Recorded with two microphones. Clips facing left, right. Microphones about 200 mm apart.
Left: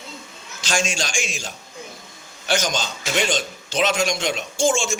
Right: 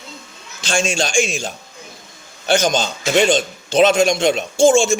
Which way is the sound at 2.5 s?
25° right (ahead or behind).